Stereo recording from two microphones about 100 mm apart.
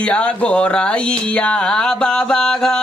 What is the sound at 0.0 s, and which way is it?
Music, 10° left (ahead or behind).